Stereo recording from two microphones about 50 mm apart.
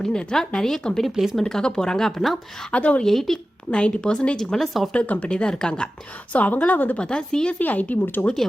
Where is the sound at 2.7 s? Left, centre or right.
Left.